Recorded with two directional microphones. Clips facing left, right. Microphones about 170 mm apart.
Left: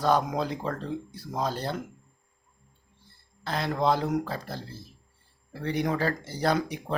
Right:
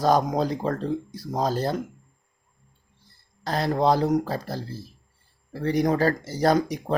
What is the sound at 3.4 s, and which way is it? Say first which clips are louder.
Speech: right 4 dB; 40° right (ahead or behind).